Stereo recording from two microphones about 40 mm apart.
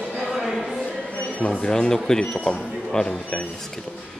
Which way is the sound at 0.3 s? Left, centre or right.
Centre.